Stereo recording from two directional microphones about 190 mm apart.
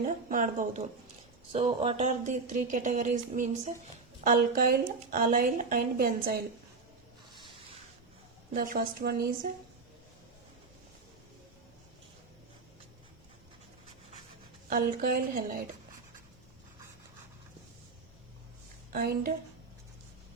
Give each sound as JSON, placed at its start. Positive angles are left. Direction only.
{"t": 0.3, "sound": "a woman's voice", "side_deg": -45}
{"t": 8.5, "sound": "a woman's voice", "side_deg": -45}
{"t": 14.7, "sound": "a woman's voice", "side_deg": -50}
{"t": 18.9, "sound": "a woman's voice", "side_deg": -50}